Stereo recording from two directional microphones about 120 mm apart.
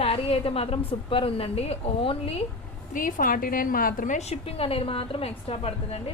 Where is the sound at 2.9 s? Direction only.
90° left.